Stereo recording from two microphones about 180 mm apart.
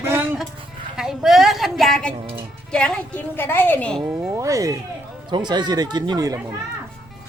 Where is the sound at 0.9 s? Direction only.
5° right (ahead or behind).